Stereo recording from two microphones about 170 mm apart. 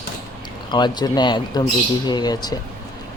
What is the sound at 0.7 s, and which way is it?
Speech, 25° left (ahead or behind).